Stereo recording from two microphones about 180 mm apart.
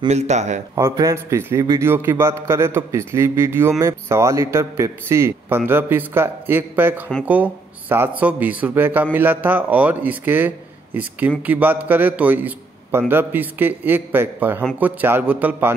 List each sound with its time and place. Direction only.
0.1 s speech: 40° right (ahead or behind)
0.7 s speech: 20° right (ahead or behind)